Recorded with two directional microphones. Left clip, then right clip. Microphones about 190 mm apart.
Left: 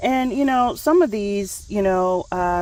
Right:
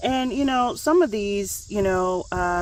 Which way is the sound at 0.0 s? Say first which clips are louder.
Left 3 dB; 30° left (ahead or behind).